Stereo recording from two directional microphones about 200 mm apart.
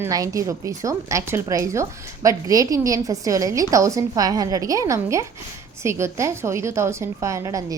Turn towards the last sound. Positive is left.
turn(degrees=-15)  # may be behind; listen again after turning